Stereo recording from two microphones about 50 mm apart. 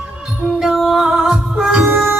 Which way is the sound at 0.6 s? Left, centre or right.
Centre.